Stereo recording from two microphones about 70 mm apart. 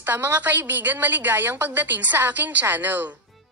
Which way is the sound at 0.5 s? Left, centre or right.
Right.